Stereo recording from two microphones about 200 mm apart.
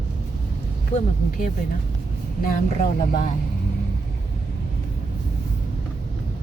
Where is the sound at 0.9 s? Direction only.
45° left (ahead or behind).